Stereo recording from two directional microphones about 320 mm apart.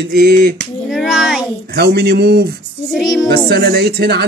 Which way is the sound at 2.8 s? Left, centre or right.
Centre.